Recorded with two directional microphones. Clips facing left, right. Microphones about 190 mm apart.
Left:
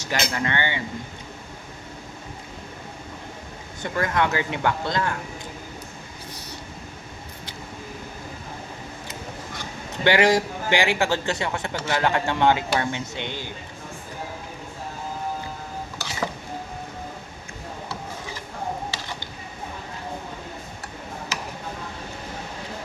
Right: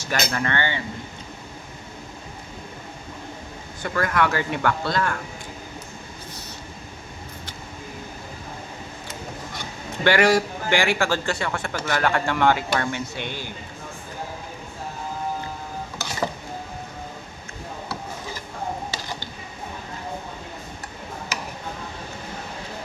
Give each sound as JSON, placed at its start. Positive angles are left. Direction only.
{"t": 0.1, "sound": "speech", "side_deg": 15}
{"t": 3.8, "sound": "a man's voice", "side_deg": 20}
{"t": 10.0, "sound": "a man's voice", "side_deg": 20}